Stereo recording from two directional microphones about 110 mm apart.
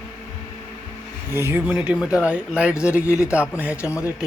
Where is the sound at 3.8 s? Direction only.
25° left (ahead or behind).